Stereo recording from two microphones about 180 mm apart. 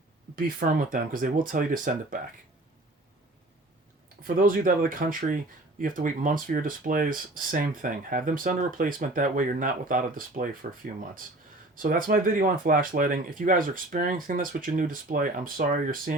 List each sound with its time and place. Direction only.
0.3 s speech: 50° right (ahead or behind)
4.2 s speech: 50° right (ahead or behind)